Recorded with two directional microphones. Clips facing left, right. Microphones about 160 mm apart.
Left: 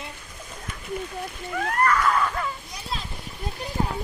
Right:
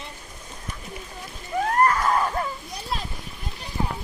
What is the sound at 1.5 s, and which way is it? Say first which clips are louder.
Screaming: right 2 dB; 35° right (ahead or behind).